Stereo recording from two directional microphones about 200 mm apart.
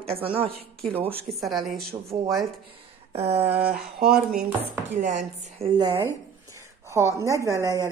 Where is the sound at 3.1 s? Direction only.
30° right (ahead or behind).